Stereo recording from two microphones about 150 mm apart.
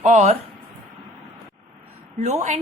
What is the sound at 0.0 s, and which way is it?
Speech, 50° right (ahead or behind).